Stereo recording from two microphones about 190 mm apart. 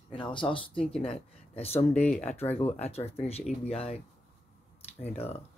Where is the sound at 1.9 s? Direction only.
10° left (ahead or behind).